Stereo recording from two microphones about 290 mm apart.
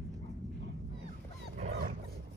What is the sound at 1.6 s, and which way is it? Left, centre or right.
Dog, right.